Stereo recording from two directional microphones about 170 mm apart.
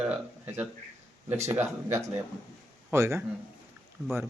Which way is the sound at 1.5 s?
15° right (ahead or behind).